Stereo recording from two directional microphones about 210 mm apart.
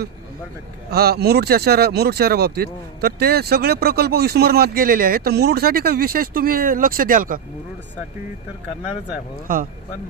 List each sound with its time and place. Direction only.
0.8 s speech: 50° right (ahead or behind)